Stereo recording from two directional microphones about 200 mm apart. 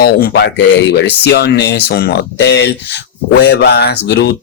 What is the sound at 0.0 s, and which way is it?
Speech, 55° left (ahead or behind).